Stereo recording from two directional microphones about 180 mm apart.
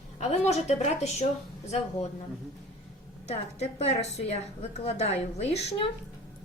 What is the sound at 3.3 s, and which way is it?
A woman's voice, 35° left (ahead or behind).